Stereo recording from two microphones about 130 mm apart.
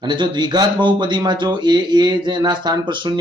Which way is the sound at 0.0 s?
35° right (ahead or behind).